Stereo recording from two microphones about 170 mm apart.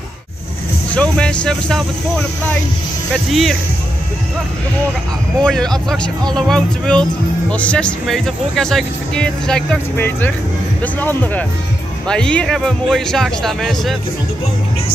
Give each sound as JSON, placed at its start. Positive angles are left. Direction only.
{"t": 0.9, "sound": "speech", "side_deg": 5}
{"t": 3.3, "sound": "speech", "side_deg": 0}
{"t": 5.4, "sound": "speech", "side_deg": 5}